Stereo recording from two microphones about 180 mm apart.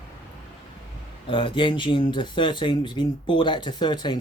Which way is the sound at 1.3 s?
30° left (ahead or behind).